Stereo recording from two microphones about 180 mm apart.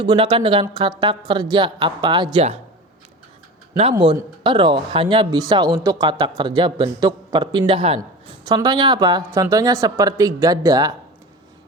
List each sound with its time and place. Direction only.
0.0 s a woman's voice: 25° right (ahead or behind)
3.9 s a woman's voice: 25° right (ahead or behind)